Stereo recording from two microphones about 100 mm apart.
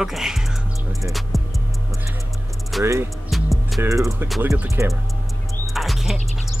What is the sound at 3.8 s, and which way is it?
Speech, 30° right (ahead or behind).